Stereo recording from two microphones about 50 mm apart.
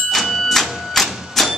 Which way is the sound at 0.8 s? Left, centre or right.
Centre.